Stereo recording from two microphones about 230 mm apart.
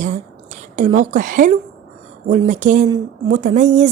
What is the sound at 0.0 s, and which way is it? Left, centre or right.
A woman's voice, right.